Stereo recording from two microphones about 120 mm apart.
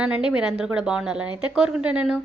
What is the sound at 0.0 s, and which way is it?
A woman's voice, 10° right (ahead or behind).